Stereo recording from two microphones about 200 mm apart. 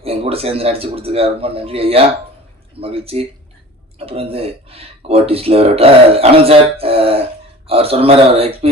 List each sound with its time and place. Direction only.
0.0 s speech: 30° right (ahead or behind)